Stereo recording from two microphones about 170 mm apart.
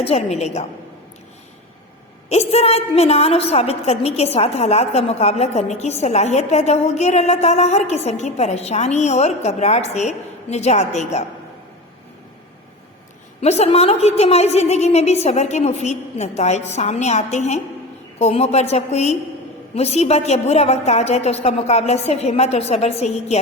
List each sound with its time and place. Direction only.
0.0 s a woman's voice: 40° left (ahead or behind)
2.3 s a woman's voice: 40° left (ahead or behind)
13.4 s a woman's voice: 40° left (ahead or behind)